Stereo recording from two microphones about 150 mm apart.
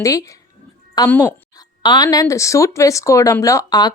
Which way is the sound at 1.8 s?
25° left (ahead or behind).